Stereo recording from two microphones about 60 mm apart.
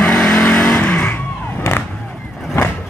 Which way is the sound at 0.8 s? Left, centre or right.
Left.